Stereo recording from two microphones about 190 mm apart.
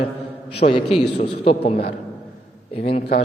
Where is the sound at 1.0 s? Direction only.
55° left (ahead or behind).